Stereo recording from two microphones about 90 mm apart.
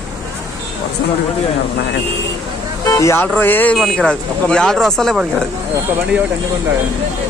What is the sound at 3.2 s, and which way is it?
Speech, 20° left (ahead or behind).